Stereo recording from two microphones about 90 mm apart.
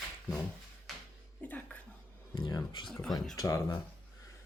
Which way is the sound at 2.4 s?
55° left (ahead or behind).